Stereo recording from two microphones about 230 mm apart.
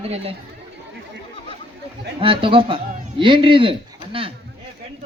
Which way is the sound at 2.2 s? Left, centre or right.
Right.